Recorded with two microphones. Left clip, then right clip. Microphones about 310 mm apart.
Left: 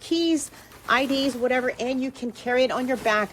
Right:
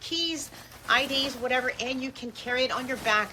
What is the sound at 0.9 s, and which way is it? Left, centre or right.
Speech, left.